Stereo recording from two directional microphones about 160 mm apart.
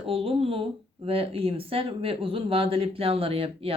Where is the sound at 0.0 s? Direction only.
35° right (ahead or behind).